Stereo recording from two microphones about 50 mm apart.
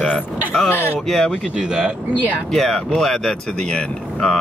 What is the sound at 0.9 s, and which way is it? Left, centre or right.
Speech, centre.